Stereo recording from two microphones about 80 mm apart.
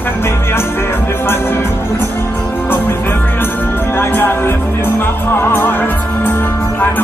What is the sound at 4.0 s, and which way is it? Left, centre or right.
Music, left.